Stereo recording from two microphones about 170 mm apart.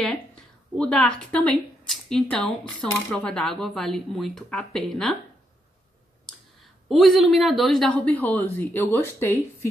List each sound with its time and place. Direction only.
0.7 s speech: 5° left (ahead or behind)
6.9 s a man's voice: centre (ahead or behind)